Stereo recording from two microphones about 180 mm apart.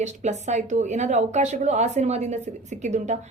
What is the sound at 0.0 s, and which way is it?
Speech, 40° right (ahead or behind).